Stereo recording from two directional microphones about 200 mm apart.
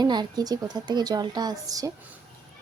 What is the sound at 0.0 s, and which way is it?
A woman's voice, 20° right (ahead or behind).